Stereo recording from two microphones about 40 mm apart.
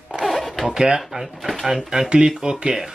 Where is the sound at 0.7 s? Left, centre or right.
Centre.